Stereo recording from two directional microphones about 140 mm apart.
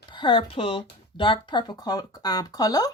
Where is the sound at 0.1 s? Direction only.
40° left (ahead or behind).